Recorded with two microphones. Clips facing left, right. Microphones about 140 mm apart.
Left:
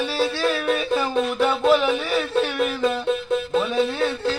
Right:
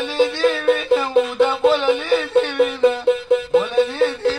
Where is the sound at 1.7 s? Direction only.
Centre (ahead or behind).